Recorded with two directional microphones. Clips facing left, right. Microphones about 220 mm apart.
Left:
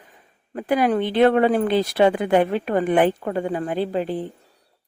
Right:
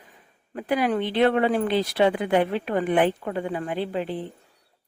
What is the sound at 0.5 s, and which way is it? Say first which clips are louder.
Speech: left 4 dB; 45° left (ahead or behind).